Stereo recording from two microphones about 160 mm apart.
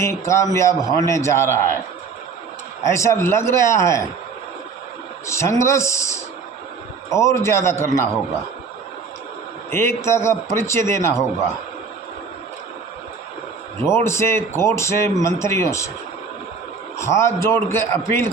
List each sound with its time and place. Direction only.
0.0 s speech: 20° left (ahead or behind)
2.8 s speech: 20° left (ahead or behind)
5.2 s speech: 20° left (ahead or behind)
9.6 s speech: 15° left (ahead or behind)
13.9 s speech: 15° left (ahead or behind)
17.0 s speech: 15° left (ahead or behind)